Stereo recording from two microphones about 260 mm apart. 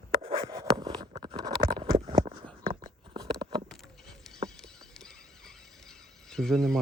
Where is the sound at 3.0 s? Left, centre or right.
Centre.